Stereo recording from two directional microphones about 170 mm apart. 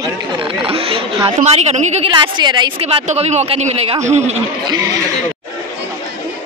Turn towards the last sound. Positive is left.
turn(degrees=-25)  # may be behind; listen again after turning